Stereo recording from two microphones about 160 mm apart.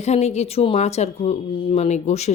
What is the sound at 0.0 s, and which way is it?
A woman's voice, 45° left (ahead or behind).